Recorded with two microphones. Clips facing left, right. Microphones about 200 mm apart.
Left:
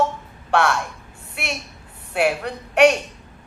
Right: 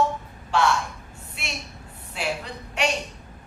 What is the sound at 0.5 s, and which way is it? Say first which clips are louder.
Speech: left 2 dB; 60° left (ahead or behind).